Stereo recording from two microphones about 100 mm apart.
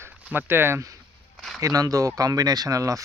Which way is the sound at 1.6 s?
35° right (ahead or behind).